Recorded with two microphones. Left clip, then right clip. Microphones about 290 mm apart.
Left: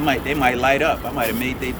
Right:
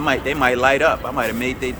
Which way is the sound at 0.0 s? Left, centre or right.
Centre.